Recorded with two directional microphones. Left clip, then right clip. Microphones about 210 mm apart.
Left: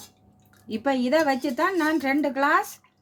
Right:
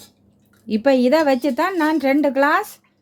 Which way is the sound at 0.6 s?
40° right (ahead or behind).